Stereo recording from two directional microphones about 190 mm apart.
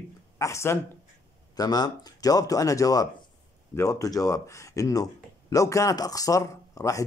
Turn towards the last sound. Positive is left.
turn(degrees=15)  # may be behind; listen again after turning